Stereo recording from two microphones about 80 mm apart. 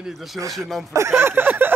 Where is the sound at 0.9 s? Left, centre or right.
Right.